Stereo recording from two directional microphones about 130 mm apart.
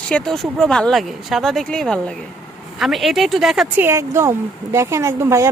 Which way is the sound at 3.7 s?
20° right (ahead or behind).